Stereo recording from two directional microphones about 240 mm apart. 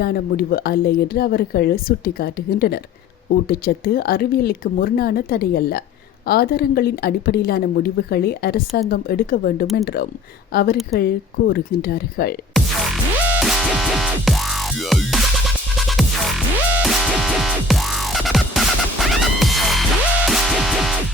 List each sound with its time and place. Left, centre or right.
0.0 s speech: left
12.5 s music: centre